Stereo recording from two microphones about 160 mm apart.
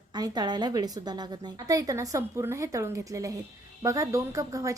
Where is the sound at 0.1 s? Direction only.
25° right (ahead or behind).